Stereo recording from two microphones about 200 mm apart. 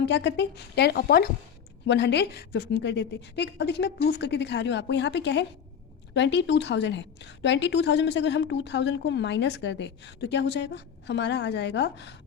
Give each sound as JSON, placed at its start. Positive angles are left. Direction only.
{"t": 0.0, "sound": "a woman's voice", "side_deg": 60}